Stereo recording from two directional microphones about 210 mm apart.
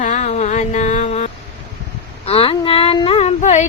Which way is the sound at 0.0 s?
35° left (ahead or behind).